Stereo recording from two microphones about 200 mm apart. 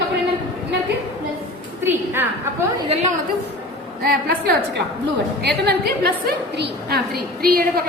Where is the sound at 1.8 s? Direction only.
10° right (ahead or behind).